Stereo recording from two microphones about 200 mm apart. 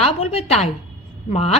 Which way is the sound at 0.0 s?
30° left (ahead or behind).